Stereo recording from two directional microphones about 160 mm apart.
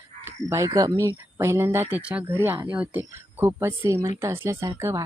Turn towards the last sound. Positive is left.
turn(degrees=-15)  # may be behind; listen again after turning